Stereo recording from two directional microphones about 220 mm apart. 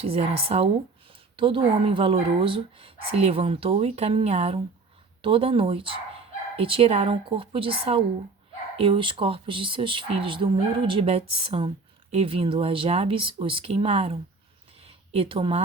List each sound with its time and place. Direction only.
0.0 s speech: 25° right (ahead or behind)